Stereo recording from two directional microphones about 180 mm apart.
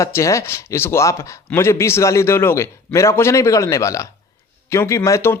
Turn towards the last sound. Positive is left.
turn(degrees=15)  # may be behind; listen again after turning